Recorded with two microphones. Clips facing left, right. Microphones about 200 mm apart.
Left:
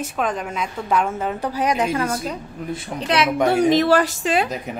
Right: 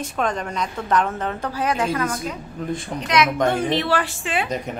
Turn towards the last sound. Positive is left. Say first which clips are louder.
# left 5 dB
turn(degrees=40)  # may be behind; listen again after turning